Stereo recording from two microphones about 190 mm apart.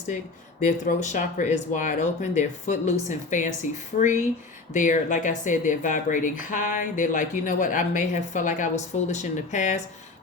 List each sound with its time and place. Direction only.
0.6 s speech: 40° left (ahead or behind)